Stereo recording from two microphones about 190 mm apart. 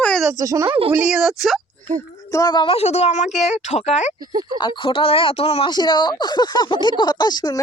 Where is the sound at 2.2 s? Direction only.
20° left (ahead or behind); by 4.1 s 35° left (ahead or behind).